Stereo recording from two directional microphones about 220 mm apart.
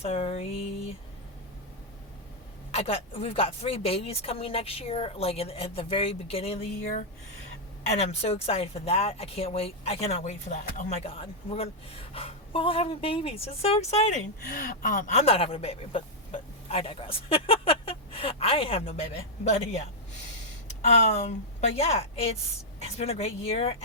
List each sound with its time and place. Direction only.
0.0 s speech: 25° left (ahead or behind)
2.7 s speech: 25° left (ahead or behind)
7.9 s speech: 30° left (ahead or behind)
14.4 s speech: 40° left (ahead or behind)
20.8 s speech: 30° left (ahead or behind)